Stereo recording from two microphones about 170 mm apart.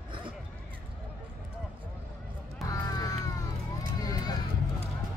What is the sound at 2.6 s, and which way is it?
Music, 20° left (ahead or behind).